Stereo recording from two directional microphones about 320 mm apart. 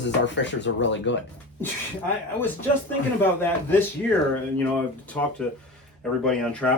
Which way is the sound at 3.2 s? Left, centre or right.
Centre.